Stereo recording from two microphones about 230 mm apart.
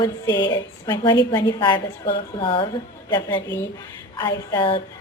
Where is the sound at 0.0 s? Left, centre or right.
Centre.